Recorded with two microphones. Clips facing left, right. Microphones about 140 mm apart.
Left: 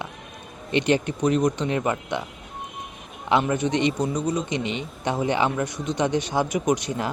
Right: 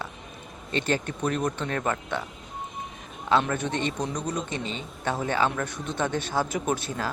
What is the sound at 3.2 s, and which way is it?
Speech, 15° left (ahead or behind).